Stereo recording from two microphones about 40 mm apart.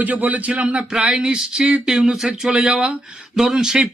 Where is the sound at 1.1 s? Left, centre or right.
Centre.